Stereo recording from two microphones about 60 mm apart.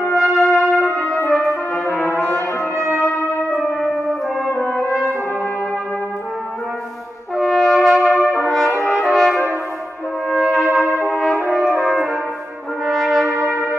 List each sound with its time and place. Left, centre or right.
0.1 s brass instrument: centre
1.9 s brass instrument: left
2.1 s brass instrument: left
7.3 s brass instrument: centre
10.3 s trumpet: centre
11.1 s brass instrument: centre